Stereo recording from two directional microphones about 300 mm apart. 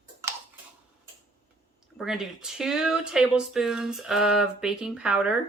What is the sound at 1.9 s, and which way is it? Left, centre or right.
Speech, centre.